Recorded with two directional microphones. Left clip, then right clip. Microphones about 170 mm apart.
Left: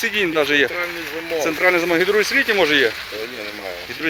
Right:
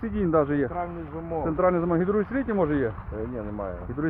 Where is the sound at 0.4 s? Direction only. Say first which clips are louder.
Left 10 dB; 35° right (ahead or behind).